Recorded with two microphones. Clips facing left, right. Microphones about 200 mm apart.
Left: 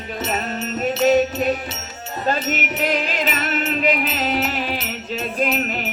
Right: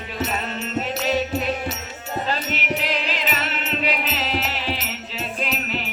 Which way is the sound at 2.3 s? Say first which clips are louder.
Left 6 dB; 45° left (ahead or behind).